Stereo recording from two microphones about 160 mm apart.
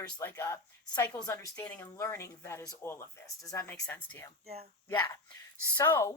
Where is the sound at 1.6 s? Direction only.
5° left (ahead or behind).